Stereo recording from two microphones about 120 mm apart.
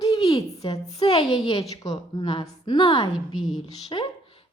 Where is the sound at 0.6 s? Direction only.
45° left (ahead or behind).